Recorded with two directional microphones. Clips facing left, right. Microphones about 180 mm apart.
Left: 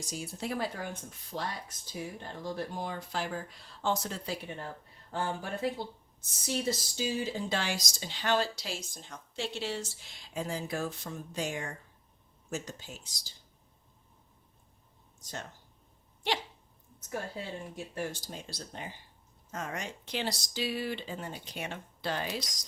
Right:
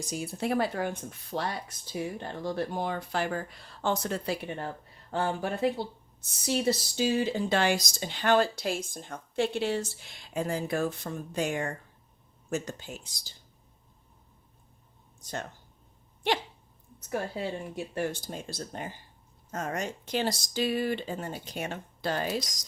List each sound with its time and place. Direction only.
0.0 s speech: 60° right (ahead or behind)
17.1 s speech: 70° right (ahead or behind)
17.9 s speech: 55° right (ahead or behind)